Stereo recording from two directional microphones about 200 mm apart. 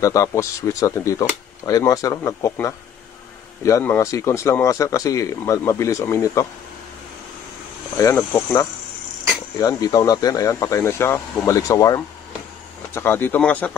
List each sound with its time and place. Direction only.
0.0 s speech: 15° left (ahead or behind)
8.0 s speech: 15° left (ahead or behind)